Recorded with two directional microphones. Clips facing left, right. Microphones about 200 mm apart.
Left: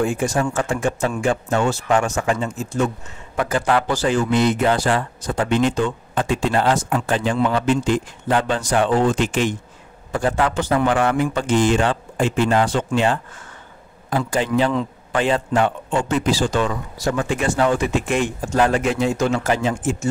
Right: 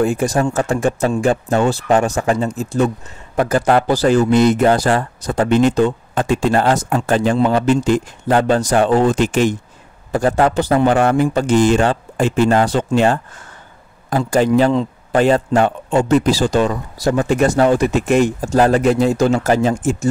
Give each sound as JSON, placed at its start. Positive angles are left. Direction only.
{"t": 0.0, "sound": "a man's voice", "side_deg": -40}